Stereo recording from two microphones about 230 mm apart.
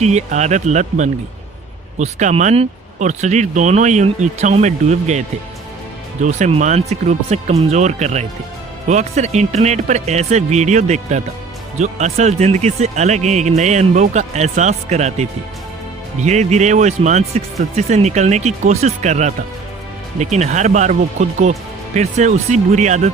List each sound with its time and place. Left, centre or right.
0.0 s speech: right
6.2 s speech: right